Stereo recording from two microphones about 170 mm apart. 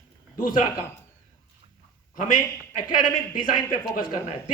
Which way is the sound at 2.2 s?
50° left (ahead or behind).